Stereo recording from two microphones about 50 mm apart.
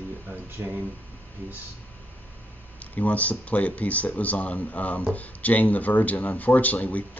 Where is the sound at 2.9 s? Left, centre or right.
Left.